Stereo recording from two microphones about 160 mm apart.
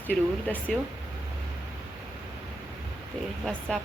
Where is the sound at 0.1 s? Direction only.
10° left (ahead or behind).